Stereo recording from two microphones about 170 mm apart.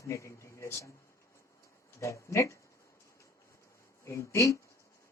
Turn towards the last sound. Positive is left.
turn(degrees=20)  # may be behind; listen again after turning